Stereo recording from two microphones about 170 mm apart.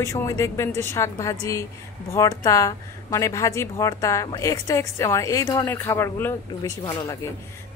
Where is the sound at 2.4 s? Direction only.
20° left (ahead or behind).